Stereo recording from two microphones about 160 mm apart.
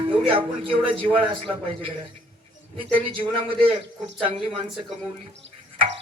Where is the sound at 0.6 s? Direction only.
35° right (ahead or behind).